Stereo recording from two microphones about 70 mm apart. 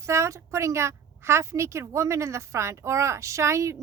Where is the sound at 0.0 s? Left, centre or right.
Right.